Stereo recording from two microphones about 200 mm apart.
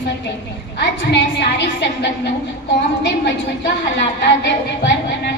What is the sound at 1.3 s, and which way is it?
Speech, 55° left (ahead or behind).